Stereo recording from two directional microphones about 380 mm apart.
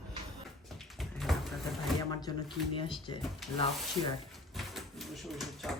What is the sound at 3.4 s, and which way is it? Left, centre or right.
Speech, centre.